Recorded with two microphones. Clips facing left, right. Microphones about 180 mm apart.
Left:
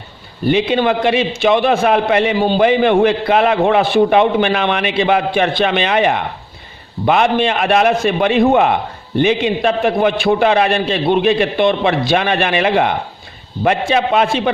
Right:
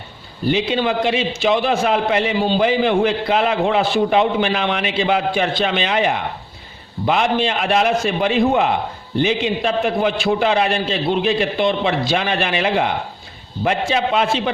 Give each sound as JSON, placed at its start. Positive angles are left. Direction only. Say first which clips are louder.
{"t": 0.4, "sound": "a man's voice", "louder": "left 4 dB", "side_deg": 60}